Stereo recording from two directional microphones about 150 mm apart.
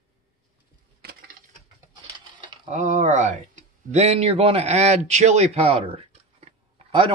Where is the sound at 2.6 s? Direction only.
55° right (ahead or behind).